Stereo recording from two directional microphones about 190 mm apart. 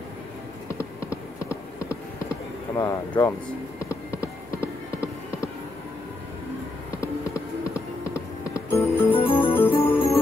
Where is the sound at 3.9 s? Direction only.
15° left (ahead or behind).